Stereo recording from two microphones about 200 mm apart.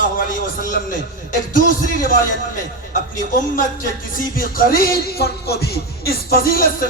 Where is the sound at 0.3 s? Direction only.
45° left (ahead or behind).